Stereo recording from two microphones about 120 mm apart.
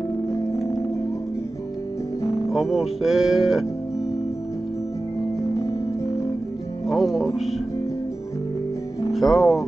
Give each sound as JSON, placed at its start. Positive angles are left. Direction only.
{"t": 2.5, "sound": "speech", "side_deg": 0}
{"t": 6.9, "sound": "speech", "side_deg": 0}
{"t": 9.1, "sound": "speech", "side_deg": 0}